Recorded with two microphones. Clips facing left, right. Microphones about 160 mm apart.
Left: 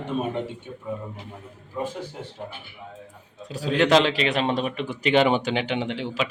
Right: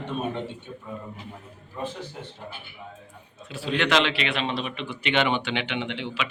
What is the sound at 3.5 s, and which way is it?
A man's voice, 40° left (ahead or behind).